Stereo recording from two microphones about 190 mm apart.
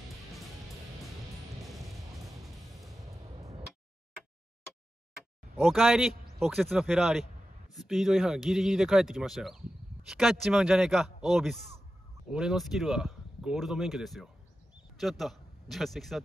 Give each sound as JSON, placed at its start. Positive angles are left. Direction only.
{"t": 3.3, "sound": "music", "side_deg": -30}
{"t": 5.6, "sound": "a man's voice", "side_deg": 0}